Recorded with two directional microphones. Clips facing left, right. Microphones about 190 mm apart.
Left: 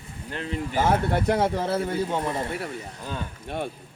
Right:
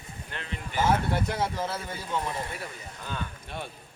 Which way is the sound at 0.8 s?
55° left (ahead or behind).